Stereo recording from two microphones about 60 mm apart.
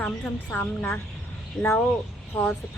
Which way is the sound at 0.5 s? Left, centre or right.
Left.